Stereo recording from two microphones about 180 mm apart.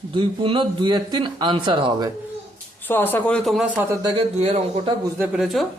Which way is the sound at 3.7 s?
20° right (ahead or behind).